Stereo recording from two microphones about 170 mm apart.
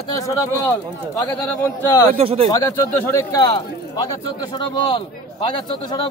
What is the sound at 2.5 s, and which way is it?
A man's voice, 15° left (ahead or behind).